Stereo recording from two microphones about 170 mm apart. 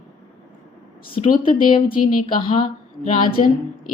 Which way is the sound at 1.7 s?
30° left (ahead or behind).